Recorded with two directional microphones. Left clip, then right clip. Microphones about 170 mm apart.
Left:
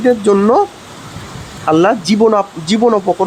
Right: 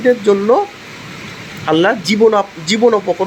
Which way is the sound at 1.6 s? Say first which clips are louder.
Left 2 dB; 20° left (ahead or behind).